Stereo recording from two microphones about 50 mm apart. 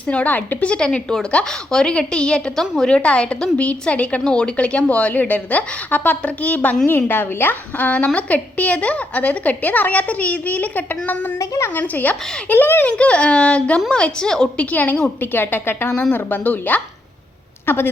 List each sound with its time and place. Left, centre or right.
0.1 s a woman's voice: left
0.9 s a woman's voice: centre; by 6.7 s left
6.8 s a woman's voice: left
7.9 s a woman's voice: left
11.3 s a woman's voice: left
11.7 s a woman's voice: left
12.9 s a woman's voice: left
14.5 s a woman's voice: left
17.7 s a woman's voice: left